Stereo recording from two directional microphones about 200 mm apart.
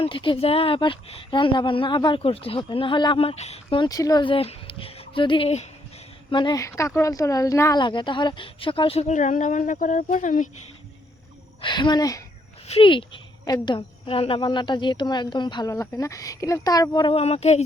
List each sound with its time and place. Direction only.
0.0 s a woman's voice: 25° left (ahead or behind)
11.6 s a woman's voice: 20° left (ahead or behind)